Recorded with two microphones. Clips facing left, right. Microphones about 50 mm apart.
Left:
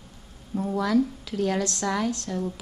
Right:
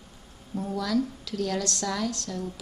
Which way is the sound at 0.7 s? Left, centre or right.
Left.